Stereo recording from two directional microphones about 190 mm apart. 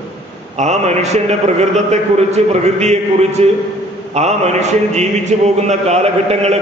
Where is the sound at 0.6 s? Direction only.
35° right (ahead or behind).